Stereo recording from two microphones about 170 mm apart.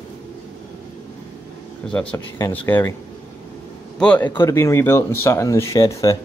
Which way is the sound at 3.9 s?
10° left (ahead or behind).